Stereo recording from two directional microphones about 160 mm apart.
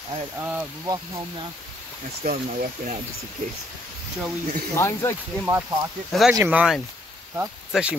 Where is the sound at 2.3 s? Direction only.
65° right (ahead or behind).